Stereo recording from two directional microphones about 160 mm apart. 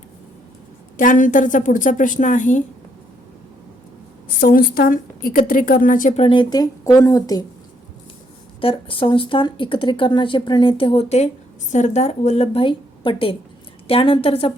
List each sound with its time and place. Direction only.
0.9 s a woman's voice: 55° left (ahead or behind)
4.4 s a woman's voice: 65° left (ahead or behind)
6.1 s speech: 35° left (ahead or behind)
8.6 s speech: 35° left (ahead or behind)